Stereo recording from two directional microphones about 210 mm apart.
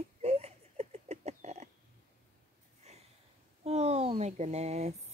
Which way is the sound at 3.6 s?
30° right (ahead or behind).